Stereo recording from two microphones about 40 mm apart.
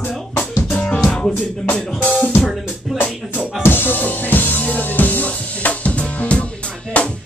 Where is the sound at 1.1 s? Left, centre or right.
Centre.